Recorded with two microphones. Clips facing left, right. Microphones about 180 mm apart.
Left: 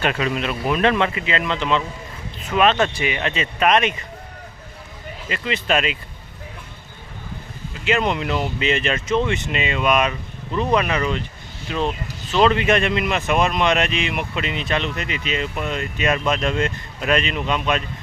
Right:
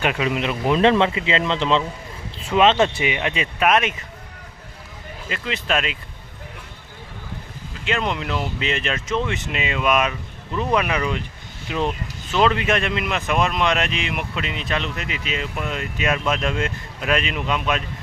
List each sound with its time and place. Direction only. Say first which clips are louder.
0.0 s speech: even; 10° right (ahead or behind)
5.3 s speech: left 2 dB; centre (ahead or behind)
7.9 s speech: left 3 dB; 5° left (ahead or behind); by 11.8 s 15° right (ahead or behind)
12.3 s speech: left 2 dB; centre (ahead or behind)